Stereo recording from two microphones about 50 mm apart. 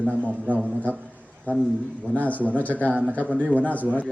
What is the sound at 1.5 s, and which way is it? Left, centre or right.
A man's voice, left.